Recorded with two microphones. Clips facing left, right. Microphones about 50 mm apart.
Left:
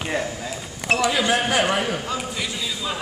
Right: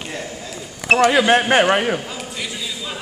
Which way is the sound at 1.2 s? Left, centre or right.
Right.